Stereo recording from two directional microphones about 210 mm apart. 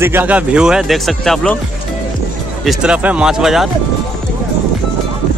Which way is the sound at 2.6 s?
5° right (ahead or behind).